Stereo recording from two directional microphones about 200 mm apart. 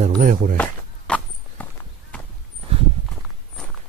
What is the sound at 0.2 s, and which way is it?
Speech, 45° right (ahead or behind).